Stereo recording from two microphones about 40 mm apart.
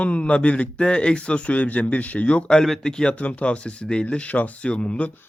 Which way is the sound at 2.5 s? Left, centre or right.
Centre.